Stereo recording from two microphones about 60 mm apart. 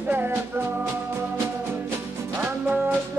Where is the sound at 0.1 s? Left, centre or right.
Right.